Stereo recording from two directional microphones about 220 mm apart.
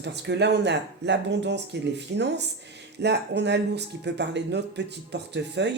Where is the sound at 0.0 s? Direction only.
50° right (ahead or behind).